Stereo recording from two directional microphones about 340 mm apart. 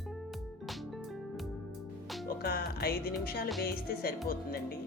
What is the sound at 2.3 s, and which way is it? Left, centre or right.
Music, left.